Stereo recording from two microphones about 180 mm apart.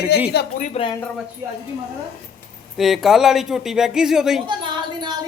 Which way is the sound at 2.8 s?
Centre (ahead or behind).